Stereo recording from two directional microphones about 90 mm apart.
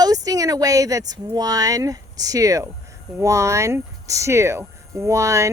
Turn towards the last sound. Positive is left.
turn(degrees=-35)  # may be behind; listen again after turning